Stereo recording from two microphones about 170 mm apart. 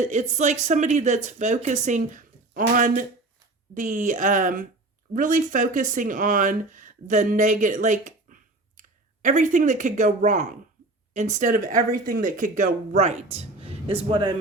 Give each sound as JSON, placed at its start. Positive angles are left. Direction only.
{"t": 0.0, "sound": "a man's voice", "side_deg": -40}